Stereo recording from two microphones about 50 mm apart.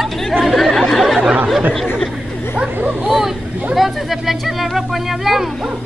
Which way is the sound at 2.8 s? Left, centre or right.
Right.